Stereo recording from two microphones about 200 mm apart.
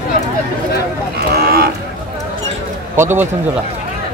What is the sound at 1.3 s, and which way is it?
Livestock, 50° right (ahead or behind).